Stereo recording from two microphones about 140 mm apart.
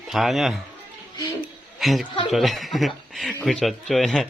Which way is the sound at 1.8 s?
Centre (ahead or behind).